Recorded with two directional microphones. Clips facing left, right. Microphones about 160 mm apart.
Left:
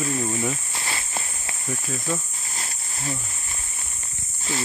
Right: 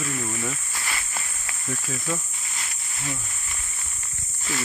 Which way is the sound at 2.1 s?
35° left (ahead or behind).